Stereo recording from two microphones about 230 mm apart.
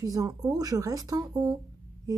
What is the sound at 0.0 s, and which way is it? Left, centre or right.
Speech, centre.